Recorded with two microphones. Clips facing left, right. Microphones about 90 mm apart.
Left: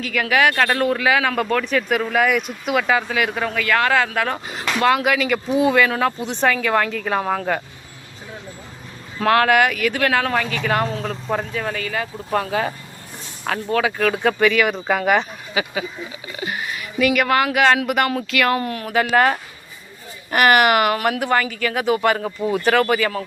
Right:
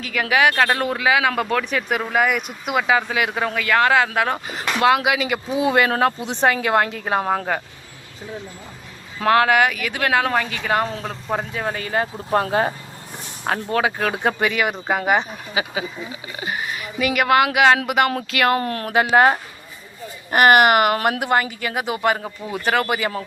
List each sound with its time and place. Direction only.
0.0 s speech: 20° right (ahead or behind)
2.1 s a woman's voice: 10° right (ahead or behind); by 7.4 s 25° right (ahead or behind)
9.2 s speech: 20° right (ahead or behind)
9.5 s speech: 10° right (ahead or behind)
18.1 s a woman's voice: 35° right (ahead or behind)
18.9 s speech: 20° right (ahead or behind)
20.3 s a woman's voice: 40° right (ahead or behind)
21.2 s speech: 25° right (ahead or behind)
23.0 s speech: 20° right (ahead or behind)